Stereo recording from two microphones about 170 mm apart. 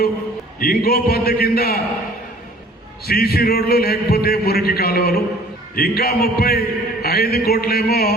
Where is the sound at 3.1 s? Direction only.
65° left (ahead or behind).